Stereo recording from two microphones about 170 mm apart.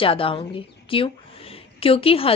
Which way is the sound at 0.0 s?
30° left (ahead or behind).